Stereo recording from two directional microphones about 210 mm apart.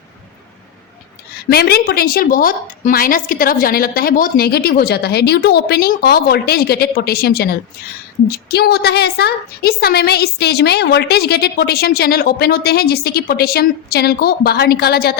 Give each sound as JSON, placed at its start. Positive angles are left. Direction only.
{"t": 1.5, "sound": "a woman's voice", "side_deg": 50}